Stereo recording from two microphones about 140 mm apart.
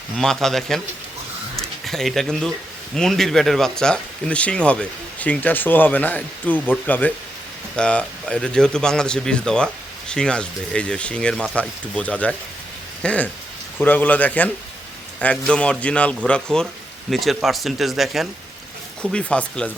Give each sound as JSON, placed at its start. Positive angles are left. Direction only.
{"t": 0.2, "sound": "speech", "side_deg": 5}
{"t": 1.5, "sound": "a sound", "side_deg": 0}
{"t": 2.9, "sound": "speech", "side_deg": 0}